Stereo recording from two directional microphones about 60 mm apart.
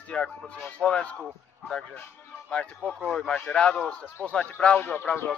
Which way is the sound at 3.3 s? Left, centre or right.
Centre.